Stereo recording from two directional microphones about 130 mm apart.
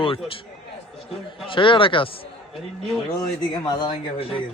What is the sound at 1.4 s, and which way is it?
Speech, 40° left (ahead or behind).